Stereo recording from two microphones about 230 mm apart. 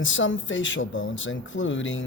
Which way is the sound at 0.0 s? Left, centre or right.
Left.